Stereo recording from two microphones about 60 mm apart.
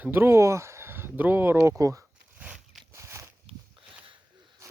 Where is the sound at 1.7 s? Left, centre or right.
Right.